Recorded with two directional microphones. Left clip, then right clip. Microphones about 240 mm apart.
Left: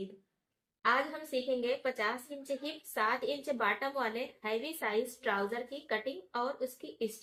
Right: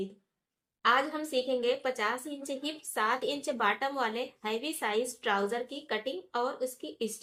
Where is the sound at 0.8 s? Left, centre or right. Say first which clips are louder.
Right 4 dB; right.